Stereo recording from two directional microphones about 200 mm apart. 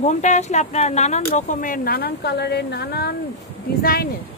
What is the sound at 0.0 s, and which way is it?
Speech, 35° left (ahead or behind).